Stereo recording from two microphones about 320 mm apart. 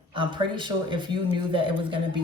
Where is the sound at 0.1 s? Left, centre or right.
Centre.